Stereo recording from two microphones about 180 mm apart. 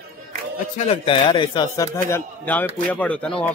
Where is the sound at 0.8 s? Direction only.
30° left (ahead or behind); by 3.3 s 10° left (ahead or behind).